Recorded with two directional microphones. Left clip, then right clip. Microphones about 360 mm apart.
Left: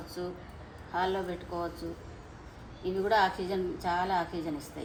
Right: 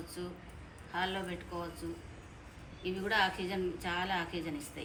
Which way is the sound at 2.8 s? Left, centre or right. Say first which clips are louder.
Left 5 dB; centre.